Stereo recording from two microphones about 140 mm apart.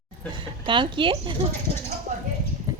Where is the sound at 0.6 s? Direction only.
35° right (ahead or behind).